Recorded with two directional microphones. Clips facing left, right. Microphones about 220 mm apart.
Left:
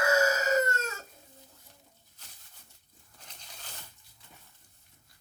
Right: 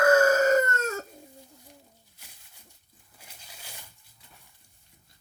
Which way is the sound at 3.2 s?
10° right (ahead or behind).